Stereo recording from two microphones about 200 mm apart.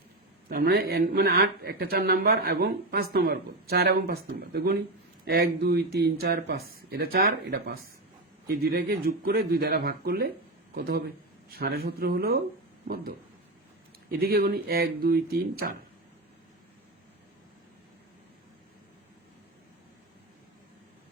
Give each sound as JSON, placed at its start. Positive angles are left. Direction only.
{"t": 0.4, "sound": "speech", "side_deg": -50}
{"t": 14.2, "sound": "speech", "side_deg": -50}